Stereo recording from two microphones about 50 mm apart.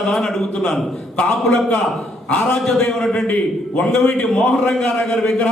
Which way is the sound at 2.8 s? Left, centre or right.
Centre.